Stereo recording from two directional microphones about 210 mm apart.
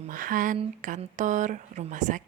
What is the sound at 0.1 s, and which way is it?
A woman's voice, 40° right (ahead or behind).